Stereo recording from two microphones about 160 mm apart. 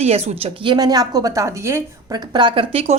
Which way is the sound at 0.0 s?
40° right (ahead or behind).